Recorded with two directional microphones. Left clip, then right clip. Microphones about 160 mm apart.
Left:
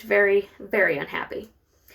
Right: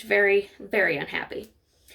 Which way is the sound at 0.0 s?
30° right (ahead or behind).